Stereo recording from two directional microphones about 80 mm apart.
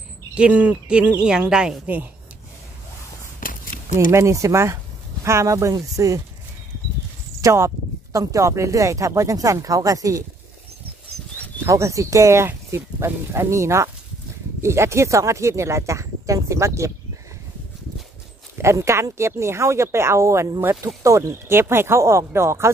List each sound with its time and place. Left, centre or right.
0.3 s speech: centre
4.1 s speech: right
7.4 s speech: right
11.6 s speech: right
18.6 s speech: right